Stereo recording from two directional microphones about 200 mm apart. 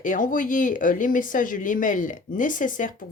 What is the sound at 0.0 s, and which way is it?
Speech, 40° left (ahead or behind).